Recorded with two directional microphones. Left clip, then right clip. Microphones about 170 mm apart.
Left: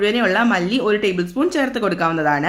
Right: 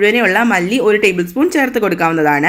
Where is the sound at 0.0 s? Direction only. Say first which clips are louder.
Right 5 dB; 15° right (ahead or behind).